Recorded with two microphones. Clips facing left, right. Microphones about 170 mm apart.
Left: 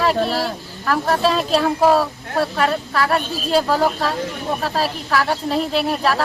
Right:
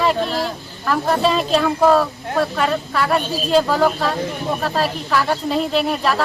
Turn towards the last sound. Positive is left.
turn(degrees=5)  # may be behind; listen again after turning